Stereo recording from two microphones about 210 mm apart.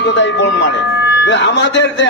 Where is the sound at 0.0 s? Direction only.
60° left (ahead or behind).